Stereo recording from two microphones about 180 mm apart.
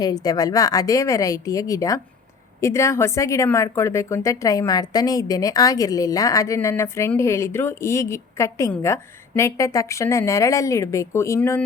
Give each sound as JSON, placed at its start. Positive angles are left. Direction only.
{"t": 0.0, "sound": "a woman's voice", "side_deg": 20}